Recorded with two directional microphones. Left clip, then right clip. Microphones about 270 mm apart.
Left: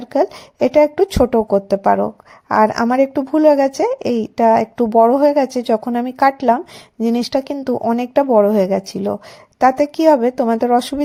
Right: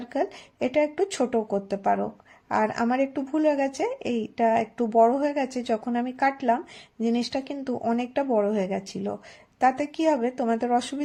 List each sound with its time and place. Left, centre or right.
0.0 s a woman's voice: left